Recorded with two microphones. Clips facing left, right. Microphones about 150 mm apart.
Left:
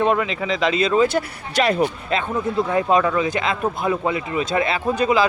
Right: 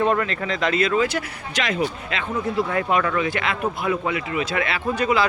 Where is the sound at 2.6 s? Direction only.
20° left (ahead or behind).